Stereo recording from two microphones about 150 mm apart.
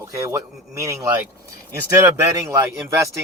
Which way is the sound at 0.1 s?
20° right (ahead or behind).